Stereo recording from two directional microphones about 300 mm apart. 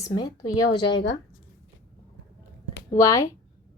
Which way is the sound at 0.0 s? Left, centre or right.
Centre.